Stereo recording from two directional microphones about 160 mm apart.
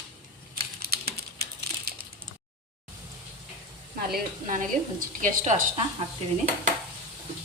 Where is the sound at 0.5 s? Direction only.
80° right.